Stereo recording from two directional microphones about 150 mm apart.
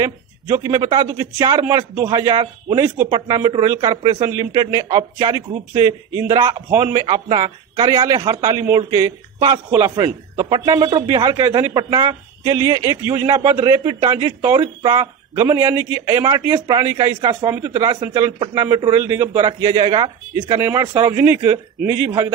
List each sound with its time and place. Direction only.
0.0 s a man's voice: 20° right (ahead or behind)